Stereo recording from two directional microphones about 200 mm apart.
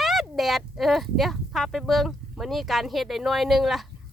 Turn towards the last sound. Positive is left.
turn(degrees=0)  # may be behind; listen again after turning